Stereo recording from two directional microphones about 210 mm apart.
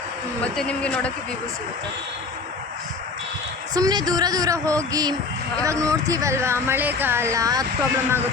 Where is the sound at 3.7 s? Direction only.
20° right (ahead or behind).